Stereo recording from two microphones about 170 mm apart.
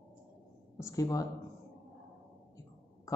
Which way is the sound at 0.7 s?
15° left (ahead or behind).